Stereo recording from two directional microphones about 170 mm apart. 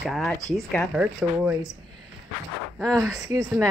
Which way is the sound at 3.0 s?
20° right (ahead or behind).